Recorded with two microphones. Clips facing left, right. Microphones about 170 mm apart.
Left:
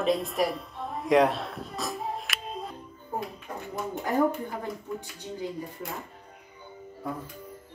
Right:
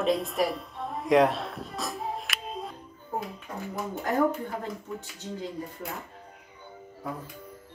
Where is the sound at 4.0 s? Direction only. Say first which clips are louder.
Even; 10° left (ahead or behind).